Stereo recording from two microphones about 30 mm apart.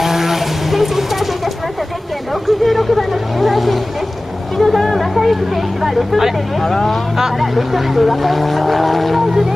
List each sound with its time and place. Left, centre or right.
0.0 s vehicle: centre
2.4 s a sound: centre
3.1 s vehicle: centre
4.6 s a sound: centre
6.6 s speech: centre
7.3 s speech: centre